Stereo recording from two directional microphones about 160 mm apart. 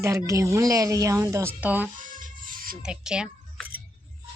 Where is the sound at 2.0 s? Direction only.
55° right (ahead or behind).